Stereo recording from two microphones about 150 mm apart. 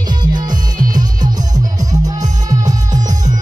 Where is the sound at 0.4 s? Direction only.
25° right (ahead or behind).